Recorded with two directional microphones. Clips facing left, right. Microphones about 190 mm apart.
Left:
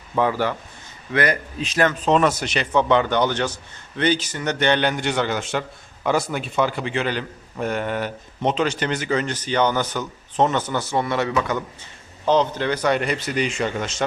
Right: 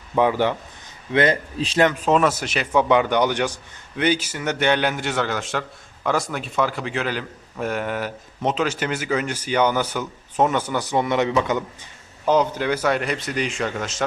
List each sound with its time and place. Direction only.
0.2 s a man's voice: 20° right (ahead or behind)
2.0 s a man's voice: 5° right (ahead or behind)